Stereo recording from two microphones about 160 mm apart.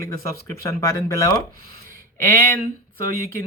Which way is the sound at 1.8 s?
65° right (ahead or behind).